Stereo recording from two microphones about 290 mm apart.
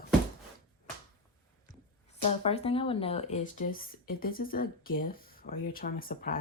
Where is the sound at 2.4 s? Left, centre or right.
Centre.